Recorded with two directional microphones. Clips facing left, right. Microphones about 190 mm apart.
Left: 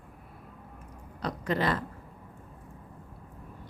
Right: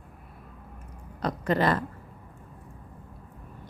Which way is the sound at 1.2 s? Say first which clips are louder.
Right 4 dB; 50° right (ahead or behind).